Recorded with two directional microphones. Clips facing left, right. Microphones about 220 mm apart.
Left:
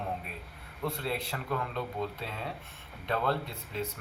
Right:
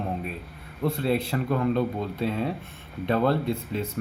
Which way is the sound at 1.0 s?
20° right (ahead or behind).